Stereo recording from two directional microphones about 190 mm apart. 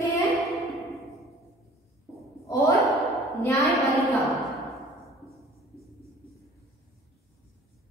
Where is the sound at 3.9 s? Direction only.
Centre (ahead or behind).